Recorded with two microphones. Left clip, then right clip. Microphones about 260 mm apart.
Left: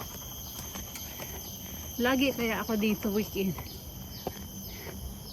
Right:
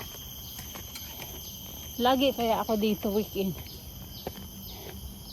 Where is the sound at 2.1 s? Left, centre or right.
Left.